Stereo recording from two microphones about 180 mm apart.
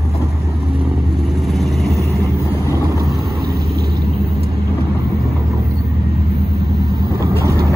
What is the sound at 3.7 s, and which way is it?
Vehicle, 60° right (ahead or behind).